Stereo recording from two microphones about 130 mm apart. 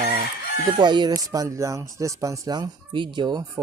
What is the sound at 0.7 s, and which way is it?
Speech, 35° right (ahead or behind).